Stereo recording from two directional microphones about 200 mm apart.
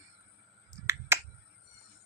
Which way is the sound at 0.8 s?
15° right (ahead or behind).